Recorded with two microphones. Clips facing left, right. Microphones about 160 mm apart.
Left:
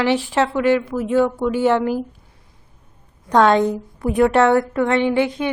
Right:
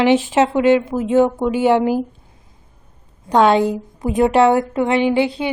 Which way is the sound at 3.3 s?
10° right (ahead or behind).